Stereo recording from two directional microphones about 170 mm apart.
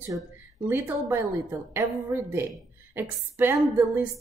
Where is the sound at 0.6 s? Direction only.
10° right (ahead or behind).